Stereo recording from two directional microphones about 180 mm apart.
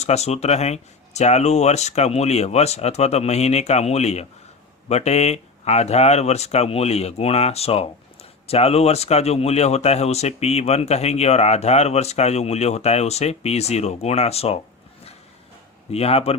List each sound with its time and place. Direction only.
0.0 s speech: 35° left (ahead or behind)
15.9 s speech: 35° left (ahead or behind)